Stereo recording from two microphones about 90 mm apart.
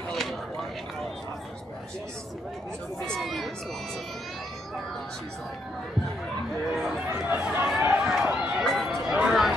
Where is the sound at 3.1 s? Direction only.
Centre (ahead or behind).